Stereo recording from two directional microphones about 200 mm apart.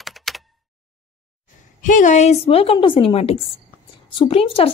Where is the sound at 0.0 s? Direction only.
Centre (ahead or behind).